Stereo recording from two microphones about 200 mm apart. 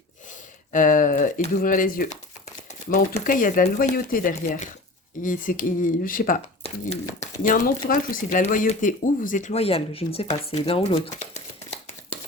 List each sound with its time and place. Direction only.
0.7 s speech: 40° left (ahead or behind)